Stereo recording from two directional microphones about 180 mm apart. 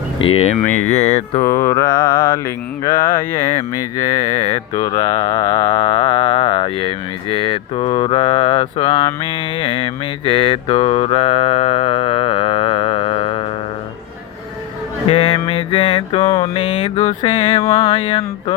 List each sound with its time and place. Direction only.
0.3 s mantra: 40° left (ahead or behind)
0.7 s mantra: 10° left (ahead or behind)
0.9 s mantra: 35° left (ahead or behind)
1.5 s mantra: 15° left (ahead or behind)
4.3 s mantra: 35° left (ahead or behind)
15.1 s mantra: 30° left (ahead or behind)